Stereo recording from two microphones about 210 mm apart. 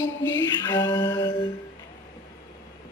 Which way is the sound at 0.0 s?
20° left (ahead or behind).